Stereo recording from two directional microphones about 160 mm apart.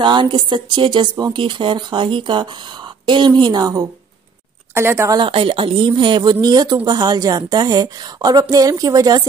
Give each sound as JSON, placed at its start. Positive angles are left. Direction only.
{"t": 0.0, "sound": "speech", "side_deg": -30}
{"t": 5.1, "sound": "speech", "side_deg": -30}